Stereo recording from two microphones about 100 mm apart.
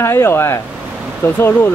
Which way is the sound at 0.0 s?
25° left (ahead or behind).